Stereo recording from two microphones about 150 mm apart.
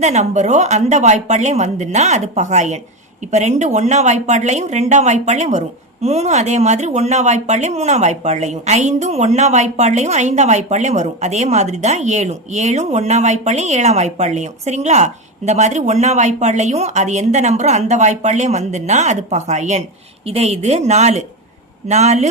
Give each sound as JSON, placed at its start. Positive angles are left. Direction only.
{"t": 0.0, "sound": "speech", "side_deg": -50}